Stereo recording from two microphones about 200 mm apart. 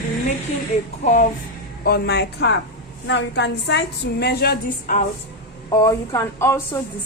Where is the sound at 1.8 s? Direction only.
55° left (ahead or behind).